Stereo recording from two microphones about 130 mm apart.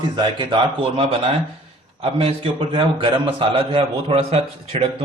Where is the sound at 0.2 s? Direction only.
40° right (ahead or behind).